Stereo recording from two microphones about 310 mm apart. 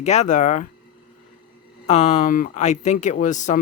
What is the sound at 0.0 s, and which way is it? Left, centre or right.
Speech, left.